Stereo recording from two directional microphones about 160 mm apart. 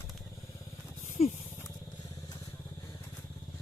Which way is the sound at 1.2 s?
40° left (ahead or behind).